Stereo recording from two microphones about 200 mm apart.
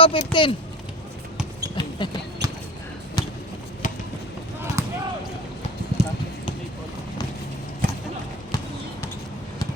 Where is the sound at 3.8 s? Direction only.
40° left (ahead or behind).